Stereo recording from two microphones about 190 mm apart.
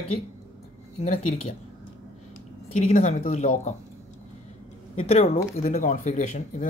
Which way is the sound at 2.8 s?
35° left (ahead or behind).